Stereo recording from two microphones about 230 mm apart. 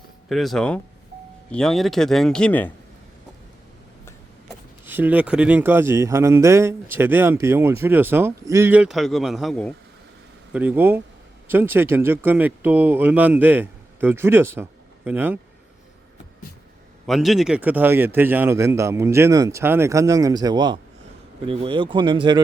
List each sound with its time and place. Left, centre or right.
0.3 s speech: centre
4.9 s speech: centre
10.5 s speech: centre
17.1 s speech: centre